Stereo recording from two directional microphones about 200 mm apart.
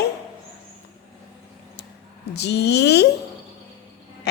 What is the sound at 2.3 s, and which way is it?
Speech, 55° left (ahead or behind).